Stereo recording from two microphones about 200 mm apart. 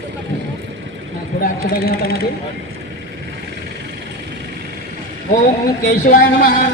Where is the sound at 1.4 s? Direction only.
45° left (ahead or behind).